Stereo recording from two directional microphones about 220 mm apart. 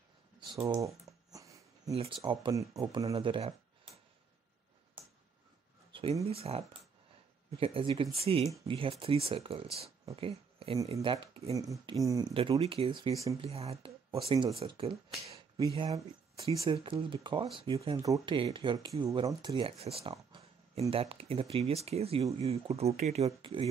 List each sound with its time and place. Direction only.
0.4 s a sound: 20° right (ahead or behind)
1.9 s speech: 25° right (ahead or behind)
6.2 s speech: 25° right (ahead or behind)